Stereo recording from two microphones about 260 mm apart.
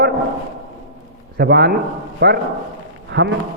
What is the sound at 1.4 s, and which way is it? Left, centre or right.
A man's voice, right.